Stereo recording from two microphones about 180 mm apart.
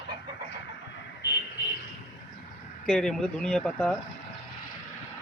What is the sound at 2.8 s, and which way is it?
Speech, 5° left (ahead or behind).